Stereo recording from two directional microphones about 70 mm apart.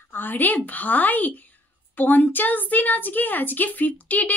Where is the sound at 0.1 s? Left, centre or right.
Left.